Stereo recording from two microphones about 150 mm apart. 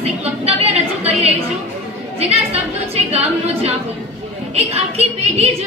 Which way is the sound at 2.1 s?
45° right (ahead or behind).